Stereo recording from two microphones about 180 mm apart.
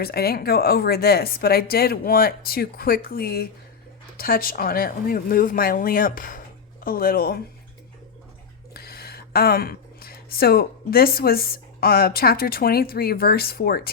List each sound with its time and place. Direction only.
0.0 s a woman's voice: 60° left (ahead or behind)
8.7 s a woman's voice: 60° left (ahead or behind)